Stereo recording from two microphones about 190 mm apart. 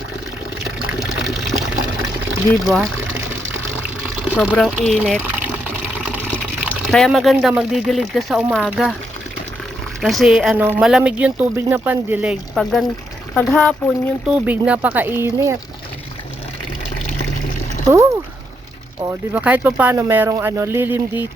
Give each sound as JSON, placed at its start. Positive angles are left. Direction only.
{"t": 0.9, "sound": "water", "side_deg": 0}
{"t": 2.5, "sound": "speech", "side_deg": 0}
{"t": 4.3, "sound": "speech", "side_deg": -5}
{"t": 10.0, "sound": "speech", "side_deg": 0}
{"t": 14.3, "sound": "speech", "side_deg": -5}
{"t": 17.8, "sound": "speech", "side_deg": -15}